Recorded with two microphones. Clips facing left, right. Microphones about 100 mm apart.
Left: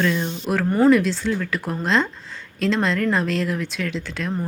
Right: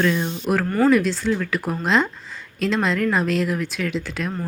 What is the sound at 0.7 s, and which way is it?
Speech, 20° left (ahead or behind).